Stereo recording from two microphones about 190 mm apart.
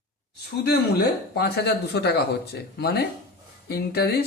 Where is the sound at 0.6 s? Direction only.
60° left (ahead or behind).